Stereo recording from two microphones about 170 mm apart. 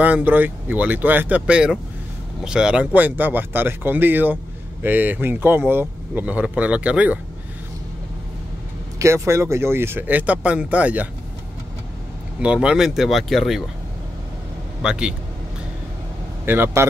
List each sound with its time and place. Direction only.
0.0 s speech: 10° right (ahead or behind)
9.0 s speech: 15° right (ahead or behind)
12.4 s speech: 5° right (ahead or behind)
14.8 s speech: 5° right (ahead or behind)
16.4 s speech: 10° right (ahead or behind)